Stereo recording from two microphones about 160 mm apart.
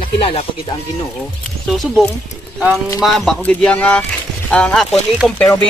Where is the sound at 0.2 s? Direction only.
35° left (ahead or behind).